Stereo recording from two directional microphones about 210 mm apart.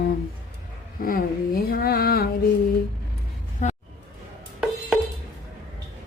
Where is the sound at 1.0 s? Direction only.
45° left (ahead or behind).